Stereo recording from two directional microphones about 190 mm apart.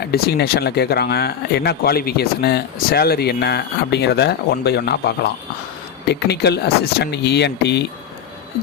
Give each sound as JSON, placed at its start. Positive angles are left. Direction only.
{"t": 0.1, "sound": "speech", "side_deg": 55}